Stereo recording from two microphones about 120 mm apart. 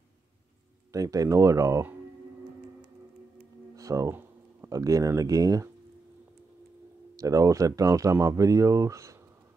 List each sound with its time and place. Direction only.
0.9 s speech: 30° right (ahead or behind)
3.7 s speech: 30° right (ahead or behind)
7.2 s speech: 30° right (ahead or behind)